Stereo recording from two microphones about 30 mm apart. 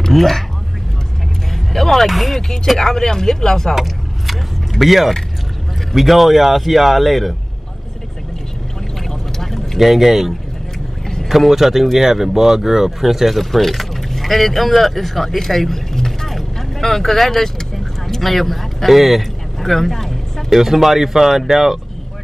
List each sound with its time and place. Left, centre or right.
0.1 s speech: centre
1.5 s music: centre
2.0 s a man's voice: centre
2.8 s speech: centre
3.7 s vehicle: centre
5.9 s a man's voice: centre
9.8 s a man's voice: centre
13.4 s speech: centre
16.3 s vehicle: centre
19.6 s vehicle: centre
20.4 s speech: centre